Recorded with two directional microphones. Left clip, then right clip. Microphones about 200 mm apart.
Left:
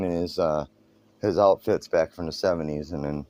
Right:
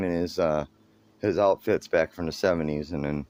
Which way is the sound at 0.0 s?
Centre (ahead or behind).